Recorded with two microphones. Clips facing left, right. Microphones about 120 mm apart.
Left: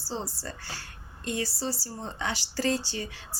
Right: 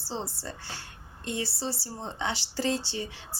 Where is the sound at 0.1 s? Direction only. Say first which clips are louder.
Even; 20° right (ahead or behind).